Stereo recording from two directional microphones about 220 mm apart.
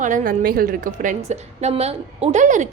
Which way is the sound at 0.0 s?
35° right (ahead or behind).